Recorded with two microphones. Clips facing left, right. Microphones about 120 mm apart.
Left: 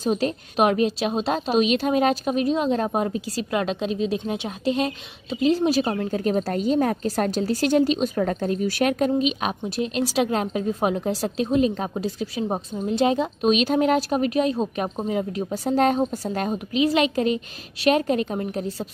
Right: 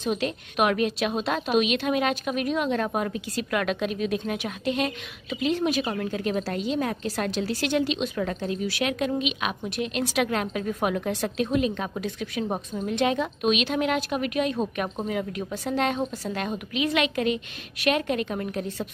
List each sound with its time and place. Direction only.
0.0 s a woman's voice: 35° left (ahead or behind)